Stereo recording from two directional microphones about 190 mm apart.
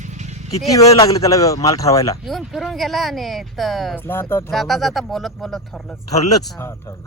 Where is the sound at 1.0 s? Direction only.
15° left (ahead or behind).